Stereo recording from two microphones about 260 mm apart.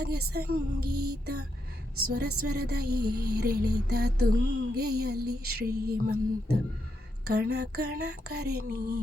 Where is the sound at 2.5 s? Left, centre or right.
Right.